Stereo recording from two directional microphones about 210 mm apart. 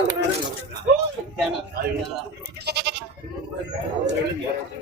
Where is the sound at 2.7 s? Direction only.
50° right (ahead or behind).